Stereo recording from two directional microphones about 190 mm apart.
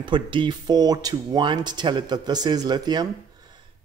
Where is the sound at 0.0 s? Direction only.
25° right (ahead or behind).